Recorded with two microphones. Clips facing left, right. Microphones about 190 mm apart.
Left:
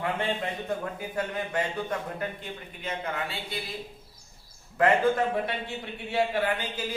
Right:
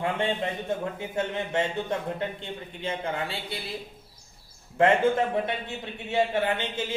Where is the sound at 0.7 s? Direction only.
25° right (ahead or behind).